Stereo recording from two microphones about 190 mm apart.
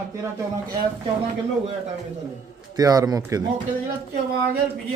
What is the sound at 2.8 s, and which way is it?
Speech, 20° right (ahead or behind).